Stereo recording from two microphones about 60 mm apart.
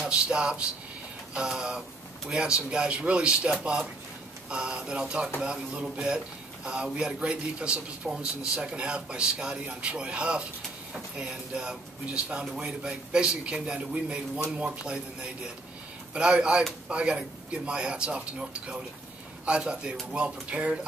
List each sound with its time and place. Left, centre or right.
0.0 s speech: centre
16.1 s speech: centre